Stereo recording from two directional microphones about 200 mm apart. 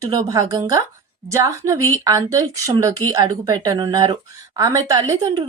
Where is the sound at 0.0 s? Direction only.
15° right (ahead or behind).